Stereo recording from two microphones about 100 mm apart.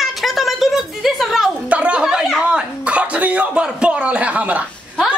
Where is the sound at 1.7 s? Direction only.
10° right (ahead or behind).